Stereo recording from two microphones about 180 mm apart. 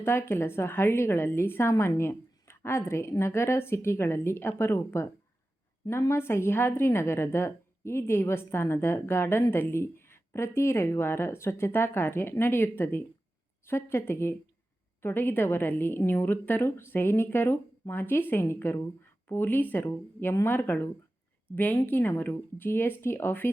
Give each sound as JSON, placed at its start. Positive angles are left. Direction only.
{"t": 0.0, "sound": "a woman's voice", "side_deg": 15}